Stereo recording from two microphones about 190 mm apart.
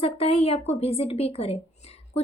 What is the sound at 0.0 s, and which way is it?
Speech, 30° left (ahead or behind).